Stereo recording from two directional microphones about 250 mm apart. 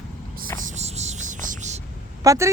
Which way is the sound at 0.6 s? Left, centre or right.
Right.